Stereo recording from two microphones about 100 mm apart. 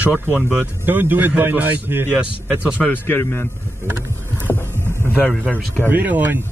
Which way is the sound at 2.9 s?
20° left (ahead or behind).